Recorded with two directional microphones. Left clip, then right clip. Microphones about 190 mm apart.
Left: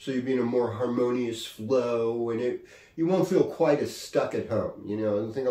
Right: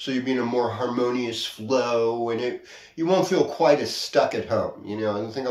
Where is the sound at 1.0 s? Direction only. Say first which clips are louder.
Right 3 dB; 20° left (ahead or behind).